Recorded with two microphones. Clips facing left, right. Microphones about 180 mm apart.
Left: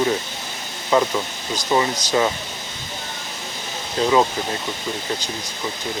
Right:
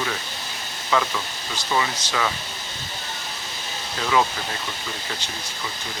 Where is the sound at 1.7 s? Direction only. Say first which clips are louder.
Left 5 dB; 35° left (ahead or behind).